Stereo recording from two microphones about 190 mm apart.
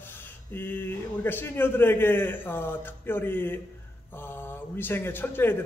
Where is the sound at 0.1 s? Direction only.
10° left (ahead or behind).